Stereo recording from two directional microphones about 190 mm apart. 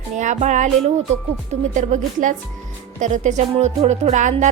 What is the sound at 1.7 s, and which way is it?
A woman's voice, 40° right (ahead or behind).